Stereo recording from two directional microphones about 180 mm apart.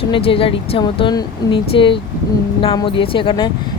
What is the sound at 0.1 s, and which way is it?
Speech, 30° left (ahead or behind).